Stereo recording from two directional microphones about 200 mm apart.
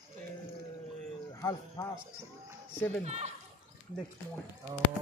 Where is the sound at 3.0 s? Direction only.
35° right (ahead or behind).